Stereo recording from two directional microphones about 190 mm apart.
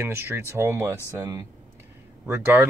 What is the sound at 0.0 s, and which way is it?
Speech, 10° right (ahead or behind).